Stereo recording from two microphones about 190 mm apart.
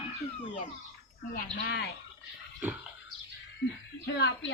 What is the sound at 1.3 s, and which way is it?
Speech, 60° left (ahead or behind).